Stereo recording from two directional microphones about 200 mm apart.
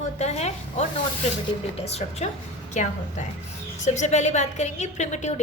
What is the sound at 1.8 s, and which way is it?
Speech, 30° left (ahead or behind).